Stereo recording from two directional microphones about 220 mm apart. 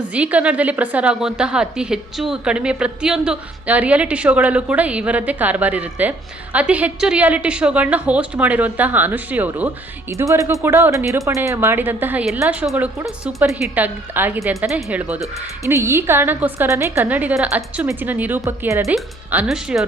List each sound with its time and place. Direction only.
0.1 s a woman's voice: 5° right (ahead or behind)